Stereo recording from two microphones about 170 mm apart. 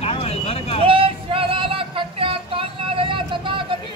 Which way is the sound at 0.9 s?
30° right (ahead or behind).